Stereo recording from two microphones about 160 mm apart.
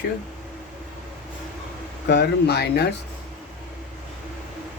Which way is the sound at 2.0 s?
90° left.